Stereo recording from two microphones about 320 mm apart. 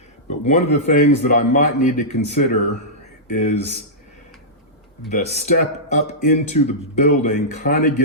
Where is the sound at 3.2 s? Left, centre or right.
Left.